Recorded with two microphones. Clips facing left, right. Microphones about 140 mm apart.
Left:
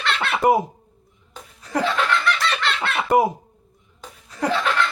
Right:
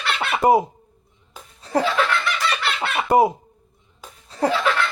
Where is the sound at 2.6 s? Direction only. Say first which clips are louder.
Even; 10° right (ahead or behind).